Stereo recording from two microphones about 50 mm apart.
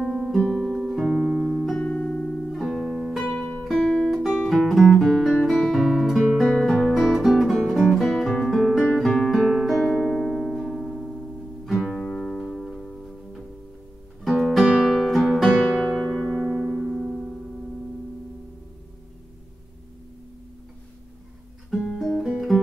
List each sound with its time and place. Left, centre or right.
0.0 s music: centre
0.6 s music: centre
1.8 s music: centre
2.5 s guitar: centre
3.8 s music: centre
8.4 s guitar: centre
9.2 s music: centre
12.4 s music: centre
14.4 s guitar: centre
14.9 s music: centre
15.6 s music: centre
16.2 s electric piano: centre
16.4 s music: centre
21.9 s music: centre